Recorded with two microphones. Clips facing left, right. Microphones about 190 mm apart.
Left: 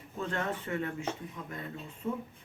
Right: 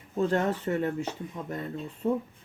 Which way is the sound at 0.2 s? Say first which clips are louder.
Right 8 dB; 35° right (ahead or behind).